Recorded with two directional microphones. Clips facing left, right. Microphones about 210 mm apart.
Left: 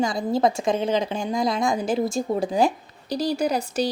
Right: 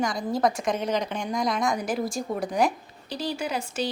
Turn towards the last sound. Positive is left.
turn(degrees=40)  # may be behind; listen again after turning